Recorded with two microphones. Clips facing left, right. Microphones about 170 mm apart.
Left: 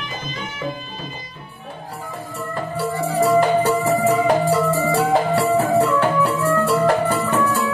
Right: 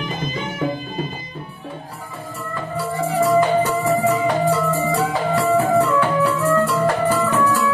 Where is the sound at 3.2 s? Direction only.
35° left (ahead or behind).